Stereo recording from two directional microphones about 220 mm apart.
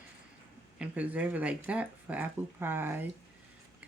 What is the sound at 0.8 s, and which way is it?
Speech, 5° right (ahead or behind).